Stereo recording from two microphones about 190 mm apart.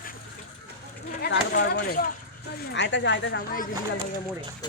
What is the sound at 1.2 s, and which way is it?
Speech, 55° left (ahead or behind).